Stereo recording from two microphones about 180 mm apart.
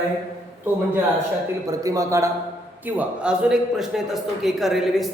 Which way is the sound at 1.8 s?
20° right (ahead or behind).